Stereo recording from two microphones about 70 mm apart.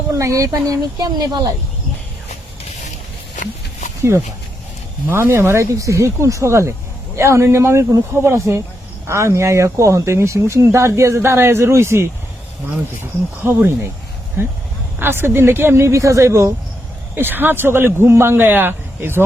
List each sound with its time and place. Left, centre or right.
0.1 s speech: right
5.0 s a man's voice: right
13.4 s a man's voice: right
17.2 s a man's voice: right